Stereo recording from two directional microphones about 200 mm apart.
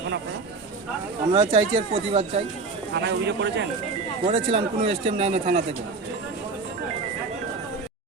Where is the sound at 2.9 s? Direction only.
55° right (ahead or behind).